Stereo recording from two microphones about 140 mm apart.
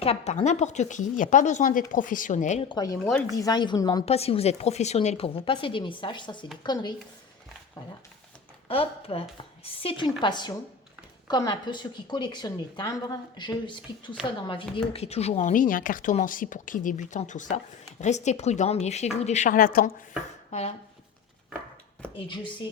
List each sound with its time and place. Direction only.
0.0 s speech: 45° left (ahead or behind)
2.6 s a woman's voice: 25° left (ahead or behind)
4.0 s a woman's voice: 45° left (ahead or behind); by 6.9 s 30° left (ahead or behind)
8.6 s a woman's voice: 40° left (ahead or behind); by 19.9 s 90° left
20.5 s speech: 50° left (ahead or behind)
22.1 s a woman's voice: 35° left (ahead or behind)